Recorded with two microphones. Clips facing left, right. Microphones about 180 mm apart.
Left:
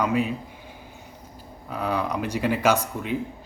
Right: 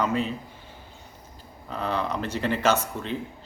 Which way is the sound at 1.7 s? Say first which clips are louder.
Left 2 dB; 10° left (ahead or behind).